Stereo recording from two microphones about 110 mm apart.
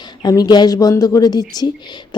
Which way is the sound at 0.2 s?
40° left (ahead or behind).